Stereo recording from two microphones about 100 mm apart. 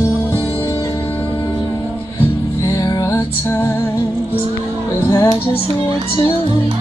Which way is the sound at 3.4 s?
20° left (ahead or behind).